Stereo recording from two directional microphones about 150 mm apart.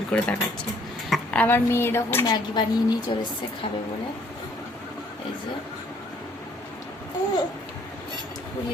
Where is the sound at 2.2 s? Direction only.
30° left (ahead or behind).